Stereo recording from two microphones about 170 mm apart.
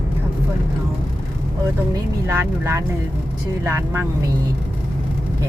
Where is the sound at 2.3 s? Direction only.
15° right (ahead or behind).